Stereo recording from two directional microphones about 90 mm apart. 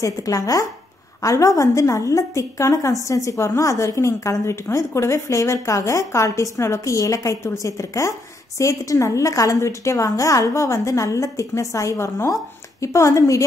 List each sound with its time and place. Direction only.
0.0 s a woman's voice: 40° left (ahead or behind)